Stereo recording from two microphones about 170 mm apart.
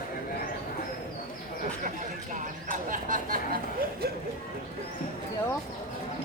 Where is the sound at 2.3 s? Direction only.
50° right (ahead or behind).